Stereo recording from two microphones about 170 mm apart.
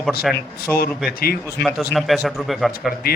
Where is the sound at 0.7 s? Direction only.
10° left (ahead or behind).